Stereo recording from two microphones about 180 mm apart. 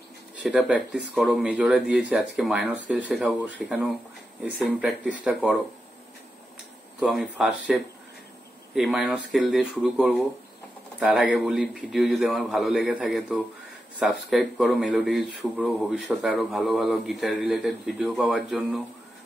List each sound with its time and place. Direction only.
0.4 s a man's voice: 5° right (ahead or behind)
7.0 s a man's voice: centre (ahead or behind)